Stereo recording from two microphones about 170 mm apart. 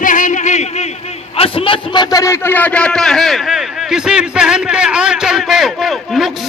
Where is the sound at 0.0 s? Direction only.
50° left (ahead or behind).